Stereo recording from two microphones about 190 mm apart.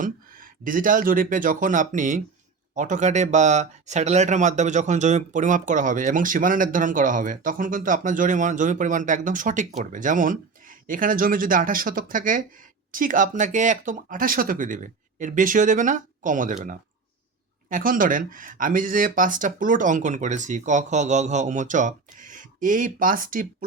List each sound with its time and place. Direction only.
0.0 s speech: 45° right (ahead or behind)
17.7 s speech: 45° right (ahead or behind)